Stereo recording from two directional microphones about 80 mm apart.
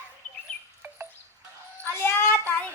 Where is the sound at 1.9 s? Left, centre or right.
Left.